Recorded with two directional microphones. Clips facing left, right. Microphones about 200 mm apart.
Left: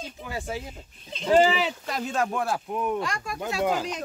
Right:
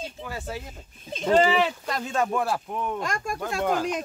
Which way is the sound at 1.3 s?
5° left (ahead or behind).